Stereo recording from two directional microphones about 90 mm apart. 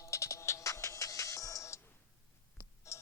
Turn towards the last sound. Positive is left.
turn(degrees=35)  # may be behind; listen again after turning